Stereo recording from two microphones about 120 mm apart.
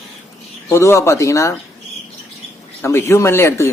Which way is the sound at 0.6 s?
25° left (ahead or behind).